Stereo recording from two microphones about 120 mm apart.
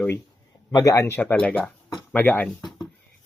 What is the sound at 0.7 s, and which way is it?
Speech, 25° left (ahead or behind).